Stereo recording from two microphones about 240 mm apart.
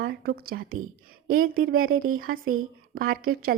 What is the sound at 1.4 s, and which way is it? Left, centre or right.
Speech, right.